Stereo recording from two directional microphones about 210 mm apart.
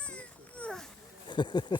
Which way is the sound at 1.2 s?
20° left (ahead or behind).